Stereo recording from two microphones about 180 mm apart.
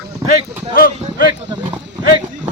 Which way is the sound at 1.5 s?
10° right (ahead or behind).